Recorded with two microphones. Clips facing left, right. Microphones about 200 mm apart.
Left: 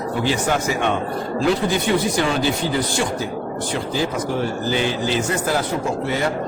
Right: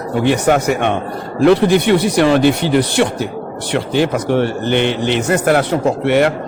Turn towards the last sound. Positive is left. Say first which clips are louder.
# right 8 dB
turn(degrees=-70)  # may be behind; listen again after turning